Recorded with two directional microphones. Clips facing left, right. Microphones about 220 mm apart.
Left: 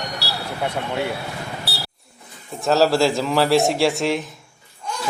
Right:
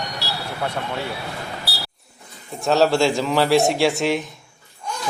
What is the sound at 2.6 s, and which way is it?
Speech, centre (ahead or behind).